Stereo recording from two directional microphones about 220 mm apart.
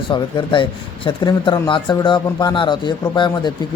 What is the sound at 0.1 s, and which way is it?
Speech, 20° left (ahead or behind).